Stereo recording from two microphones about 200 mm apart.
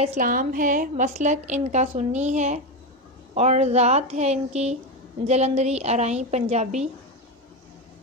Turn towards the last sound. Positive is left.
turn(degrees=-35)  # may be behind; listen again after turning